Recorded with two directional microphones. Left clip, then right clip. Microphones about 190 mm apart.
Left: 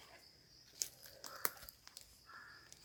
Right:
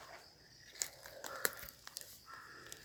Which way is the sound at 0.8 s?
30° right (ahead or behind).